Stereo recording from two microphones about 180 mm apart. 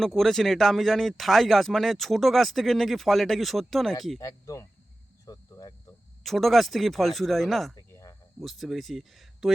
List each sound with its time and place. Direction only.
0.0 s speech: centre (ahead or behind)
4.2 s speech: 20° left (ahead or behind)
5.2 s cricket: 20° left (ahead or behind)
6.2 s speech: centre (ahead or behind)
7.8 s cricket: 20° left (ahead or behind)
8.4 s speech: centre (ahead or behind)